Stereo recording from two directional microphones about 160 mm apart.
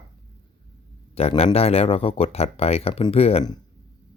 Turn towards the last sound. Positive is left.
turn(degrees=40)  # may be behind; listen again after turning